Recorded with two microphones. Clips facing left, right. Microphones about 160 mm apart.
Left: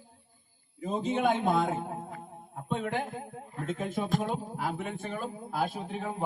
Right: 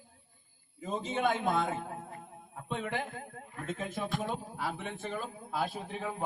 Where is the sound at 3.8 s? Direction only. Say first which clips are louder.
Left 5 dB; centre (ahead or behind).